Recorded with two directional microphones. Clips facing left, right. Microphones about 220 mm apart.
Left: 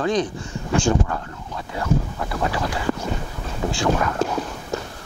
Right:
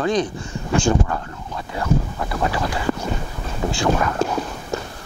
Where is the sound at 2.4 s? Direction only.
20° right (ahead or behind).